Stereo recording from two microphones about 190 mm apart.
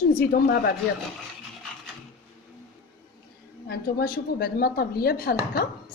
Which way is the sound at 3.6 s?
55° left (ahead or behind).